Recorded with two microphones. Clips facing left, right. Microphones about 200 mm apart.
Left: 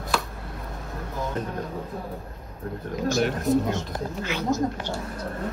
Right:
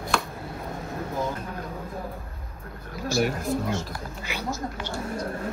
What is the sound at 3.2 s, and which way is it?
Speech, 5° right (ahead or behind).